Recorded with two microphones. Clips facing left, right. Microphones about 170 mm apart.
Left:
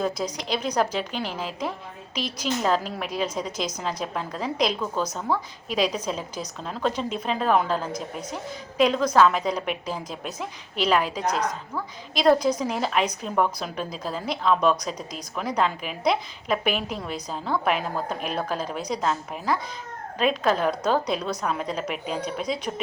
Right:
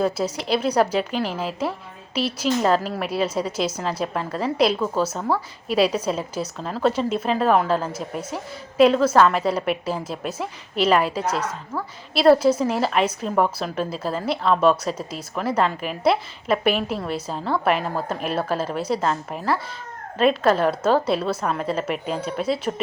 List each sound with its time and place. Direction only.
0.0 s a woman's voice: 5° right (ahead or behind)